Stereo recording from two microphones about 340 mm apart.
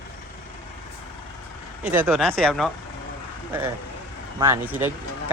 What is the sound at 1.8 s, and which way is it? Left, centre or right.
Speech, centre.